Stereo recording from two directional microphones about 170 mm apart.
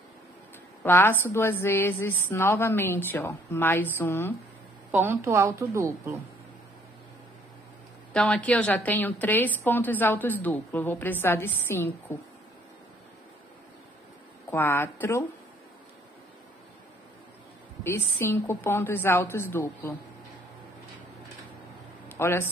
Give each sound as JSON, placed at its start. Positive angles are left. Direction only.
{"t": 0.8, "sound": "a woman's voice", "side_deg": 10}
{"t": 4.9, "sound": "a woman's voice", "side_deg": -15}
{"t": 8.1, "sound": "a woman's voice", "side_deg": 5}
{"t": 14.5, "sound": "a woman's voice", "side_deg": 10}
{"t": 17.8, "sound": "a woman's voice", "side_deg": 15}
{"t": 22.1, "sound": "a man's voice", "side_deg": 15}